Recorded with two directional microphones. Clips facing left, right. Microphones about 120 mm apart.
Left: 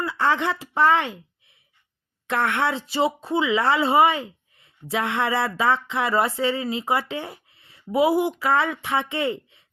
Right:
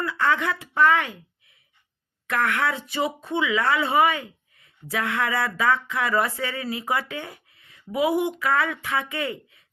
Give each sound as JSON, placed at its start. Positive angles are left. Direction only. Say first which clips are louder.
{"t": 0.0, "sound": "speech", "louder": "left 1 dB", "side_deg": 30}